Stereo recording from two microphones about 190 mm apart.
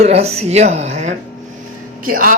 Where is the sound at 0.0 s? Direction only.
35° right (ahead or behind).